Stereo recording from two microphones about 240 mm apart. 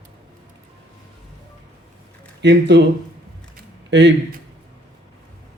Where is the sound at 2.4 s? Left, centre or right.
Right.